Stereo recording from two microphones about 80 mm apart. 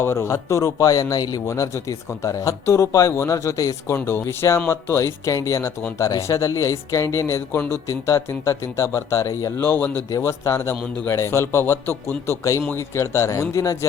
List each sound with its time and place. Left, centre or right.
0.0 s speech: left
1.5 s speech: left
3.9 s speech: left
9.6 s speech: left
10.1 s speech: left